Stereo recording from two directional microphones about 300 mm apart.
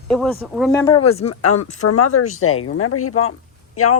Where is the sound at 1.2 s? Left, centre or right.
Left.